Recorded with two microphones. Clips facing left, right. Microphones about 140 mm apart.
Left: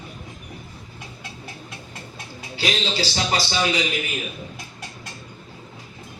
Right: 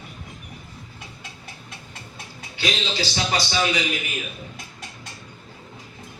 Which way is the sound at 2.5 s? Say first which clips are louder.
Left 2 dB; 30° left (ahead or behind).